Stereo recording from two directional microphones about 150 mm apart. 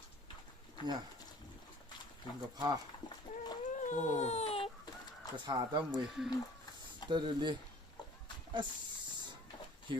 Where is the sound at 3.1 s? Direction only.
30° left (ahead or behind).